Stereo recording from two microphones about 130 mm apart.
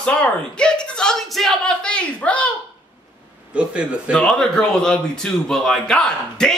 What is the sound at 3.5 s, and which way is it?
Speech, 10° right (ahead or behind).